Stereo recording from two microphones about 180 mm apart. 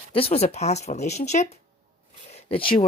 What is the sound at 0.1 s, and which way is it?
Speech, 30° left (ahead or behind).